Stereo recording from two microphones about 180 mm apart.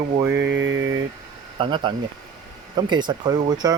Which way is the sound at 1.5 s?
30° right (ahead or behind).